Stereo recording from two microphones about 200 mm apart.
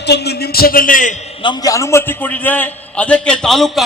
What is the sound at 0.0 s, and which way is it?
A man's voice, 55° left (ahead or behind).